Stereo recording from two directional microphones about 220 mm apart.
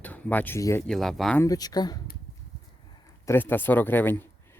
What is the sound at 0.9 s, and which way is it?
Speech, centre (ahead or behind).